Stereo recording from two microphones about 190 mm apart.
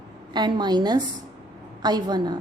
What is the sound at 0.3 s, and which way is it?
A woman's voice, 25° right (ahead or behind).